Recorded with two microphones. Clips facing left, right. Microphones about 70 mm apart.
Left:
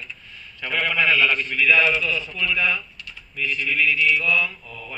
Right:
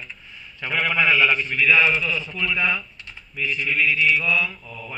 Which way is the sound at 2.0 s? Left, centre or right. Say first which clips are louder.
Even; centre.